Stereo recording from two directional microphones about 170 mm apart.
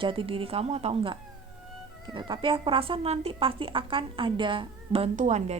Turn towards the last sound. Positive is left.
turn(degrees=-45)  # may be behind; listen again after turning